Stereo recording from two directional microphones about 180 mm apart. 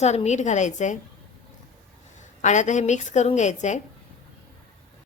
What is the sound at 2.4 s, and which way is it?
A woman's voice, 40° left (ahead or behind).